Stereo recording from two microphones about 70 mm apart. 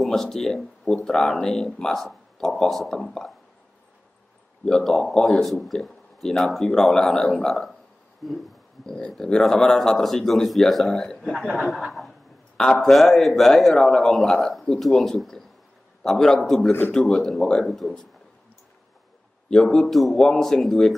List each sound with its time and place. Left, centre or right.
0.0 s speech: centre
4.6 s speech: centre
8.8 s a man's voice: centre
19.5 s speech: centre